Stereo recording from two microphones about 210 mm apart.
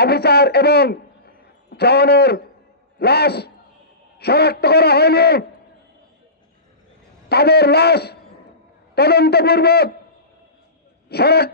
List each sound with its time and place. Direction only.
0.0 s a man's voice: 50° left (ahead or behind)
7.2 s a man's voice: 50° left (ahead or behind)
11.1 s a man's voice: 50° left (ahead or behind)